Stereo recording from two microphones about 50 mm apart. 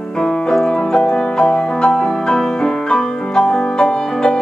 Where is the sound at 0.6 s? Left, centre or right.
Centre.